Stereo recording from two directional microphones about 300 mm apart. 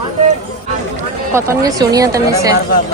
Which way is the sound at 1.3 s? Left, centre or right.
Centre.